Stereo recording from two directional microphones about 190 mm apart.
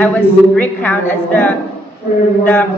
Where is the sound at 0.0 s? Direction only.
10° left (ahead or behind).